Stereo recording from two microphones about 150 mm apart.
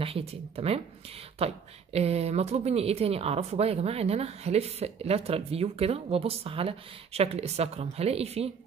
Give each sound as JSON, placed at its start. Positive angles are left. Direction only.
{"t": 0.3, "sound": "a woman's voice", "side_deg": -40}